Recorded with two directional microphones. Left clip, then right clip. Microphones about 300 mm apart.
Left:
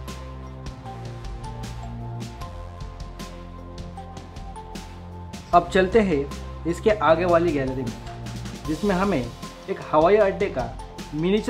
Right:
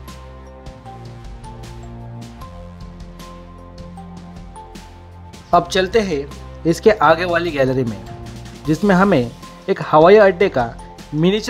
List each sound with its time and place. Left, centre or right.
5.5 s speech: centre
7.8 s music: centre
8.8 s speech: centre